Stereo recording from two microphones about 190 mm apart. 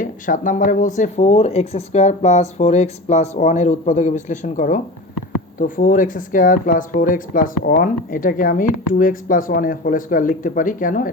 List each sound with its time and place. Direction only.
0.0 s speech: 45° left (ahead or behind)